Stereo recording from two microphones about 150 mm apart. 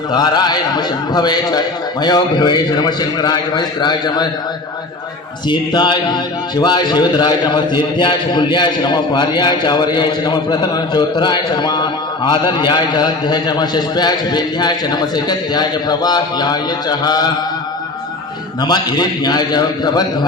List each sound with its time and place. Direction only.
0.1 s a man's voice: 30° left (ahead or behind)
5.5 s a man's voice: 30° left (ahead or behind)
18.6 s a man's voice: 30° left (ahead or behind)